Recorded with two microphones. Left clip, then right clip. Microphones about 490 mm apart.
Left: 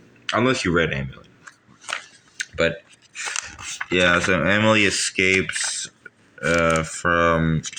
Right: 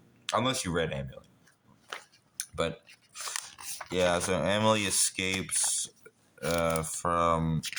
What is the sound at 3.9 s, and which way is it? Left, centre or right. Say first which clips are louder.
Speech: left 9 dB; right.